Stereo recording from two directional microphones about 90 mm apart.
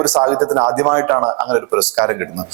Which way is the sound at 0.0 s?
10° right (ahead or behind).